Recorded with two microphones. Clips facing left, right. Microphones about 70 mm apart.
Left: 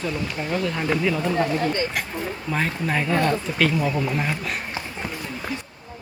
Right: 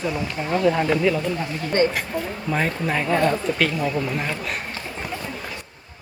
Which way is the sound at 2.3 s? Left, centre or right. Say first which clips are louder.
Right 2 dB; centre.